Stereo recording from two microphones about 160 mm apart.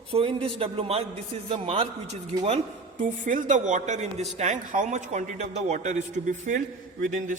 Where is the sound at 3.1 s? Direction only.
50° right (ahead or behind).